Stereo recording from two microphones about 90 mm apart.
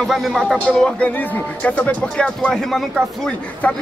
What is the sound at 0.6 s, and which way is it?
Speech, 10° left (ahead or behind).